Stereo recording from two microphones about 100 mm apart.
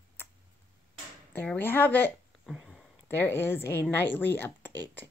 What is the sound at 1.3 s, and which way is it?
Speech, 20° left (ahead or behind).